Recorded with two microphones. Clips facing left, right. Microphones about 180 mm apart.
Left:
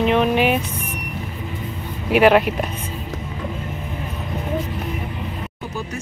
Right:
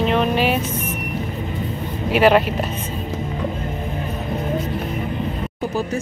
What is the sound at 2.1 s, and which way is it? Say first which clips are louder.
Speech: left 1 dB; 10° left (ahead or behind).